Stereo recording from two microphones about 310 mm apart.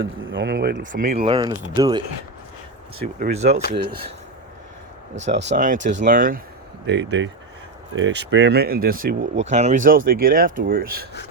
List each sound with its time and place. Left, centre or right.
0.0 s speech: right
5.5 s speech: right